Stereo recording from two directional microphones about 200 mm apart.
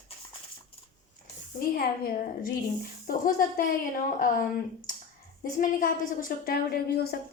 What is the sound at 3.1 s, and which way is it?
Speech, 45° left (ahead or behind).